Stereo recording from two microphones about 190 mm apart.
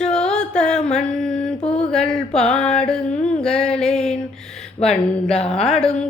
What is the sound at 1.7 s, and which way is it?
Mantra, 5° left (ahead or behind).